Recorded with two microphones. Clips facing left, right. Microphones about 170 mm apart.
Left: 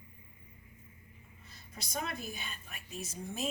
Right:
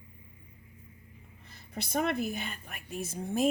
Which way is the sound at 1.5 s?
60° right (ahead or behind).